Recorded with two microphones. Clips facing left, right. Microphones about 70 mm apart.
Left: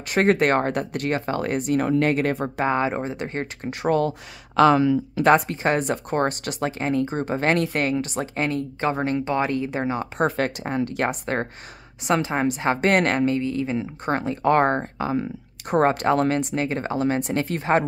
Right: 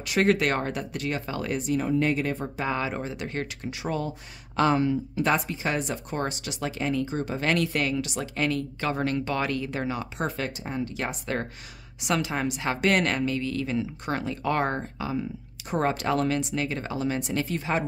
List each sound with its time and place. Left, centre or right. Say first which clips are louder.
0.0 s speech: left 4 dB; left
2.6 s speech: left 6 dB; left
3.6 s speech: left 11 dB; left
4.6 s speech: left 6 dB; left
5.2 s speech: left 8 dB; left
10.1 s speech: left 7 dB; left
12.0 s speech: left 5 dB; left
13.4 s speech: left 3 dB; left